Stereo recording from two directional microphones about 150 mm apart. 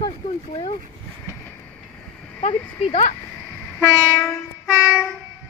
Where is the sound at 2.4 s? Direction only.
40° left (ahead or behind).